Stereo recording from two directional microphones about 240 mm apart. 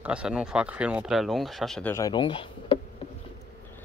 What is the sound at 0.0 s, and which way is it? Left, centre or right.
Speech, centre.